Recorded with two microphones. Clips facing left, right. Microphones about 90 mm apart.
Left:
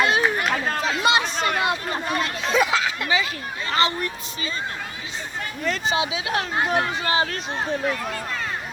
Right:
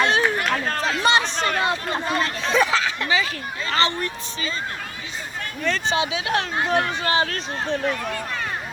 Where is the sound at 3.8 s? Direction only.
35° right (ahead or behind).